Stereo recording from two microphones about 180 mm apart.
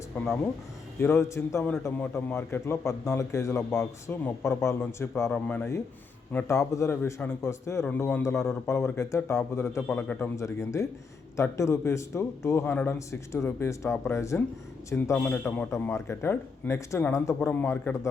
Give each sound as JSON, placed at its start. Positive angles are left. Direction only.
{"t": 0.1, "sound": "a man's voice", "side_deg": 10}